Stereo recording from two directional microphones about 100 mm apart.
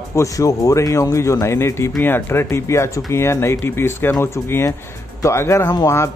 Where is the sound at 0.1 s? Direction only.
30° left (ahead or behind).